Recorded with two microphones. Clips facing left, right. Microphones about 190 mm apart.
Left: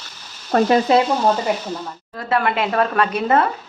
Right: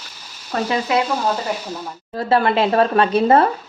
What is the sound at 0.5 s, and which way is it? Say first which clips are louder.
Stir: left 6 dB; 50° left (ahead or behind).